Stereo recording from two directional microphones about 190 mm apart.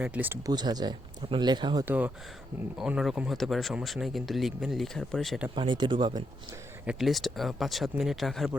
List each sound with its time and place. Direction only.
0.0 s speech: 10° right (ahead or behind)
0.5 s speech: 20° right (ahead or behind)
1.8 s speech: 10° right (ahead or behind)
5.5 s speech: 25° right (ahead or behind)
6.8 s speech: centre (ahead or behind)